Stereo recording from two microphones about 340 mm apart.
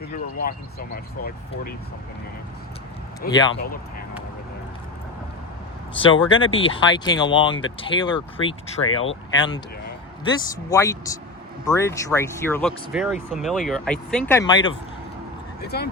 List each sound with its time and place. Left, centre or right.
0.9 s speech: left
3.2 s speech: centre
3.5 s speech: left
6.0 s speech: centre
8.8 s speech: left
9.3 s speech: centre
15.6 s speech: left